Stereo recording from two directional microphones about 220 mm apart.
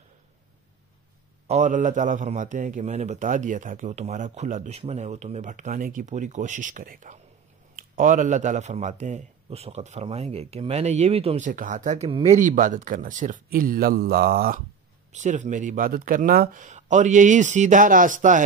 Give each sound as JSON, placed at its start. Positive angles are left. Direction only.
{"t": 1.5, "sound": "speech", "side_deg": -35}
{"t": 15.1, "sound": "speech", "side_deg": -35}